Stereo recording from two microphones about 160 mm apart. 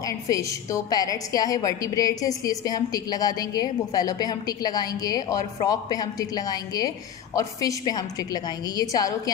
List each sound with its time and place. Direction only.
0.0 s a woman's voice: 20° left (ahead or behind)